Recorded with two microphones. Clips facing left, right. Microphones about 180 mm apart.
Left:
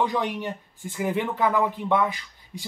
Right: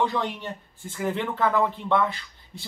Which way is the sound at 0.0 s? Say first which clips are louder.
Left 1 dB; 15° left (ahead or behind).